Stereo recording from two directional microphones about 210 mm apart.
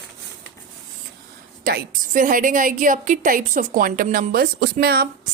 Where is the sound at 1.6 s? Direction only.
40° right (ahead or behind).